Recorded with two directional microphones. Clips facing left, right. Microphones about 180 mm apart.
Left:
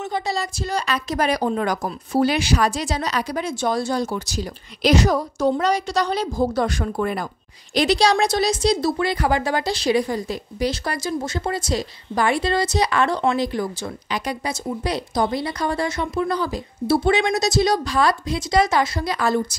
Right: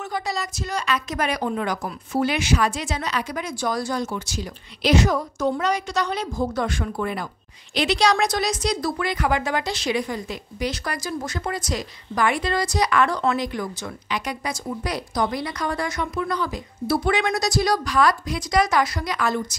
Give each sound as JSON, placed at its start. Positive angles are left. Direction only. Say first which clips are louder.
{"t": 0.0, "sound": "speech", "louder": "left 3 dB", "side_deg": 25}